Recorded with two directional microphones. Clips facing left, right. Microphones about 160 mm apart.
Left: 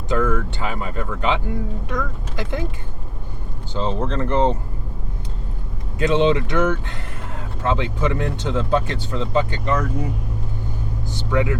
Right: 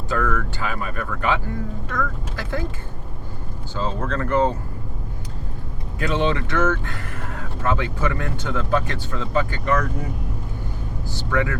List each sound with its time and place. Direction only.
0.1 s speech: 20° left (ahead or behind)
3.8 s speech: 25° left (ahead or behind)
6.0 s speech: 20° left (ahead or behind)
11.1 s speech: 20° left (ahead or behind)